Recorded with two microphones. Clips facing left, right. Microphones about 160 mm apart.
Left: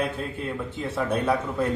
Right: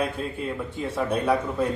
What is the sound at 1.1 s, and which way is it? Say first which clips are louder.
Speech: right 1 dB; 10° right (ahead or behind).